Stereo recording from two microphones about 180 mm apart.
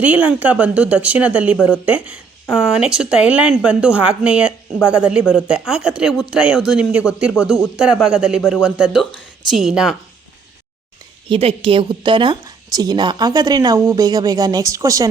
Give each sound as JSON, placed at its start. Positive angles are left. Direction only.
{"t": 0.0, "sound": "a woman's voice", "side_deg": -10}
{"t": 11.3, "sound": "a woman's voice", "side_deg": -30}